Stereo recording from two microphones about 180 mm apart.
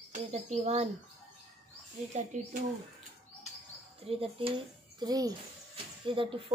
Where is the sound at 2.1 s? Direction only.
45° right (ahead or behind).